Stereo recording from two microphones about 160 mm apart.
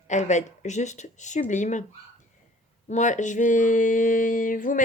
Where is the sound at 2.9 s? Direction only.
50° left (ahead or behind).